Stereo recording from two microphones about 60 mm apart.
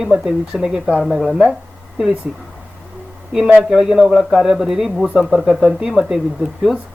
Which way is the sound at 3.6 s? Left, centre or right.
Centre.